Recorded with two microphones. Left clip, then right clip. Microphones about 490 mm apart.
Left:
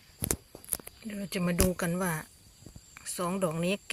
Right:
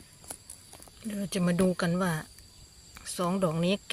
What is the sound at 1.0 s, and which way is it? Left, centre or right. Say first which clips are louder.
Speech: right 2 dB; left.